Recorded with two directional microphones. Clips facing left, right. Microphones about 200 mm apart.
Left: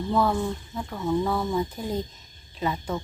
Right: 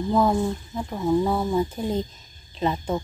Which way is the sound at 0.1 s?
20° right (ahead or behind).